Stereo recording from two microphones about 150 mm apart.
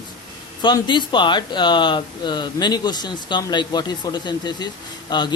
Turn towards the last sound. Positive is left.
turn(degrees=30)  # may be behind; listen again after turning